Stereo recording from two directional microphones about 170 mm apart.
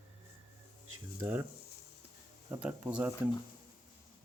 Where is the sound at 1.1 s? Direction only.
15° right (ahead or behind).